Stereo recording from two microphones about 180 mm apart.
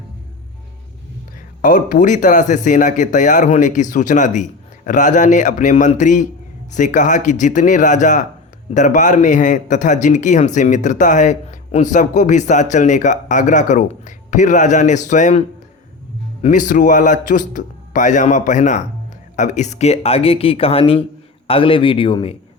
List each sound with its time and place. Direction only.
1.6 s speech: 45° left (ahead or behind); by 22.4 s 30° left (ahead or behind)